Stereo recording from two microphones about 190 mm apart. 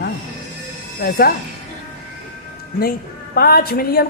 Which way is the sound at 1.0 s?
55° left (ahead or behind).